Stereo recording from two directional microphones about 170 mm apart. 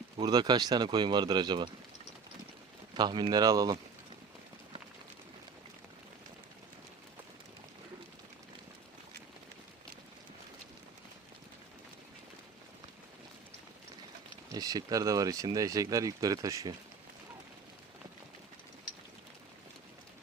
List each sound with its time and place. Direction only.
0.2 s speech: 25° right (ahead or behind)
2.9 s speech: 25° right (ahead or behind)
14.5 s speech: 20° right (ahead or behind)